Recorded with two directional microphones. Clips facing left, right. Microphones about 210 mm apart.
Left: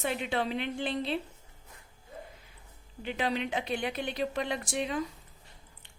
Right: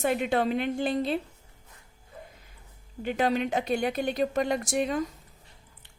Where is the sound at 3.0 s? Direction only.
45° right (ahead or behind).